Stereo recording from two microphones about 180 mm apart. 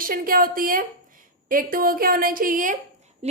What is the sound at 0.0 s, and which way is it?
A woman's voice, 50° right (ahead or behind).